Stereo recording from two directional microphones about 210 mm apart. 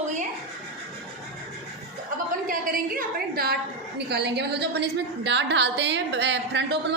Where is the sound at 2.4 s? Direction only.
40° right (ahead or behind).